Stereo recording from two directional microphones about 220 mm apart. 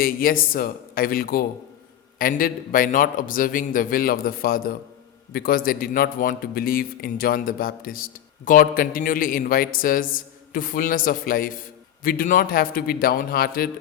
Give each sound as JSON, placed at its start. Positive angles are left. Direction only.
{"t": 0.0, "sound": "a man's voice", "side_deg": 40}